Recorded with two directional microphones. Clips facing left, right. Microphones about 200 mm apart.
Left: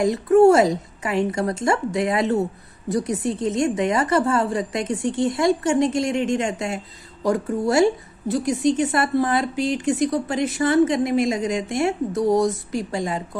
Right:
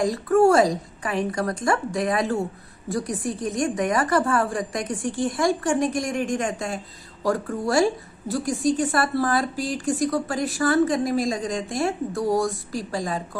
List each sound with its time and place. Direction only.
0.0 s a woman's voice: 20° left (ahead or behind)